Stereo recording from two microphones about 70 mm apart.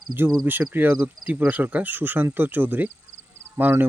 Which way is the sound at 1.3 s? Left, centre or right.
Right.